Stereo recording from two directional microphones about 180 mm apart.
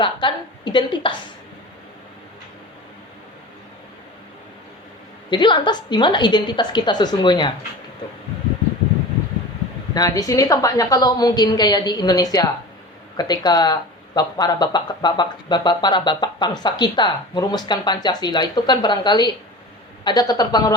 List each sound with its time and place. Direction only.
0.0 s speech: 25° left (ahead or behind)
5.3 s speech: 25° left (ahead or behind)
9.9 s speech: 20° left (ahead or behind)